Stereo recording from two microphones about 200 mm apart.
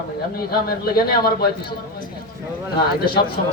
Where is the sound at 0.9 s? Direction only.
50° left (ahead or behind).